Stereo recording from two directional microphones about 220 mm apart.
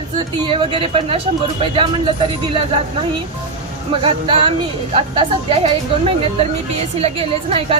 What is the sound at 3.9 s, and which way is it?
A woman's voice, 25° right (ahead or behind).